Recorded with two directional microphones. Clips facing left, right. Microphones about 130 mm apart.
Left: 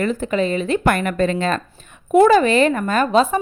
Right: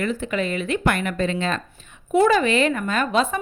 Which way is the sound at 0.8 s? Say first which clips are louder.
Left 4 dB; 45° left (ahead or behind).